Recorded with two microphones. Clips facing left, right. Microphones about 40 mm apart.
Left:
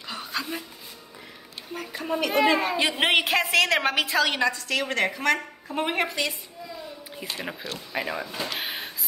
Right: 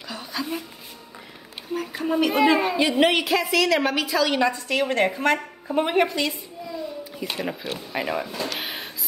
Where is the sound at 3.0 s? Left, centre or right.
Left.